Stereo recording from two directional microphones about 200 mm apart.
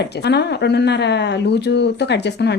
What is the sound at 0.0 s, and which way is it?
Speech, 55° left (ahead or behind).